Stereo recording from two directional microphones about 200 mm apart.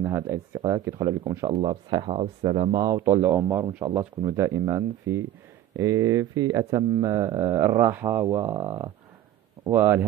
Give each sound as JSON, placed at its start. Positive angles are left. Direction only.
{"t": 0.0, "sound": "speech", "side_deg": -10}